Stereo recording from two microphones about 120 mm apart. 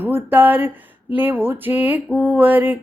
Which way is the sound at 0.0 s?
20° right (ahead or behind).